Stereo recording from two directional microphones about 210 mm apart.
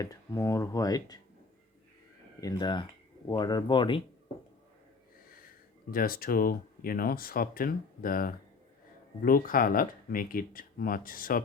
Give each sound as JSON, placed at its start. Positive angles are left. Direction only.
{"t": 0.0, "sound": "speech", "side_deg": 15}
{"t": 2.4, "sound": "speech", "side_deg": 20}
{"t": 5.9, "sound": "speech", "side_deg": 45}